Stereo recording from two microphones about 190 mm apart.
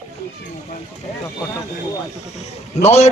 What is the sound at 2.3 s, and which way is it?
Speech, 35° left (ahead or behind).